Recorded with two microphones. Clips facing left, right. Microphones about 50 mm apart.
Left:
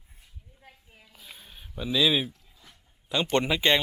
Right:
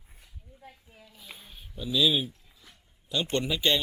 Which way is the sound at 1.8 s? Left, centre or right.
Left.